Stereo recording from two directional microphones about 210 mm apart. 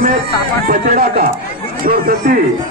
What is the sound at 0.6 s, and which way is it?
A man's voice, 45° right (ahead or behind).